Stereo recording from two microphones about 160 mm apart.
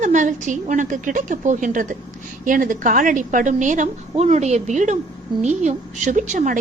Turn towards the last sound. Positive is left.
turn(degrees=-50)  # may be behind; listen again after turning